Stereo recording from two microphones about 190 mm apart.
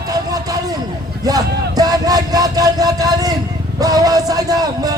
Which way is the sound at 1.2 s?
20° right (ahead or behind).